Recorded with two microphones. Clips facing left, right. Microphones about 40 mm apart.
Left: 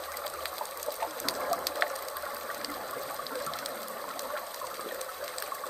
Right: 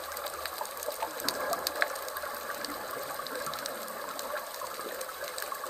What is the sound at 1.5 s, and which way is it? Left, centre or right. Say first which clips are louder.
Water: left 1 dB; left.